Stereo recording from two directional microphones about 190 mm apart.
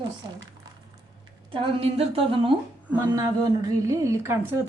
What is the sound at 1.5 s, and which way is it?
A woman's voice, 30° right (ahead or behind).